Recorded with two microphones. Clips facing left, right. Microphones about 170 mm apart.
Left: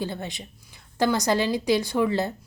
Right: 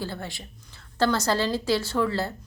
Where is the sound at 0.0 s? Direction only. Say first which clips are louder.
Left 3 dB; 20° left (ahead or behind).